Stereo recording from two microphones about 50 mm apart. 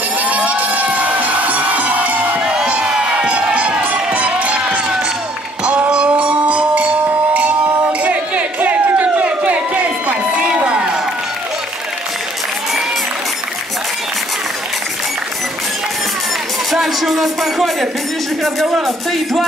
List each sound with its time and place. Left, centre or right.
0.2 s crowd: right
2.4 s crowd: centre
3.8 s run: right
5.9 s music: right
8.0 s a sound: right
10.5 s crowd: right
16.7 s a sound: centre
18.4 s speech: centre